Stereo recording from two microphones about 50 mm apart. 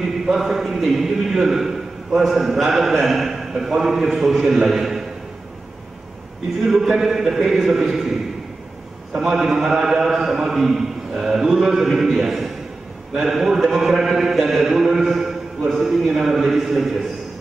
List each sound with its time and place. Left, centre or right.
0.3 s a man's voice: centre
6.6 s a man's voice: centre
9.1 s a man's voice: centre